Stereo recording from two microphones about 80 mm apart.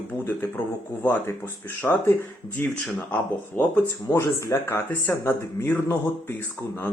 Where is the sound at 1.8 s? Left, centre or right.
Left.